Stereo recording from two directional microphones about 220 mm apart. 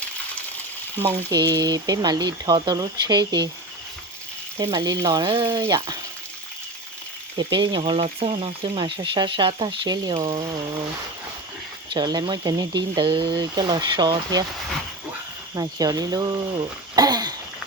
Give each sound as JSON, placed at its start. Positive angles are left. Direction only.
{"t": 1.0, "sound": "speech", "side_deg": -20}
{"t": 4.6, "sound": "speech", "side_deg": -15}
{"t": 7.3, "sound": "frying", "side_deg": -20}
{"t": 10.2, "sound": "speech", "side_deg": -35}
{"t": 11.9, "sound": "frying", "side_deg": -20}
{"t": 15.5, "sound": "speech", "side_deg": -15}